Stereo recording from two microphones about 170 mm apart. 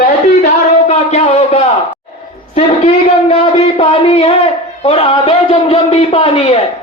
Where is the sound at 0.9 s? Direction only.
40° left (ahead or behind).